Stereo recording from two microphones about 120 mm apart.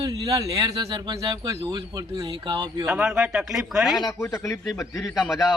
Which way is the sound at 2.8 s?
10° right (ahead or behind).